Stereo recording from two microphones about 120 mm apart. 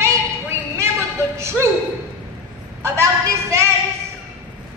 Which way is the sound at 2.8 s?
25° right (ahead or behind).